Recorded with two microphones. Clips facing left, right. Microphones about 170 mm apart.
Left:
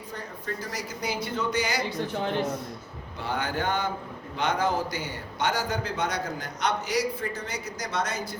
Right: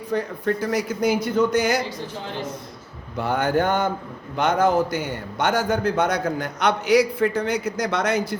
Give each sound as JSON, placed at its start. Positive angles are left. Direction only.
{"t": 0.1, "sound": "speech", "side_deg": -70}
{"t": 3.2, "sound": "a man's voice", "side_deg": -45}